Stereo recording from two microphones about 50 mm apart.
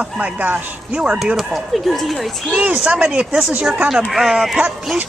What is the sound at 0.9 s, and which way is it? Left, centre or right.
Speech, right.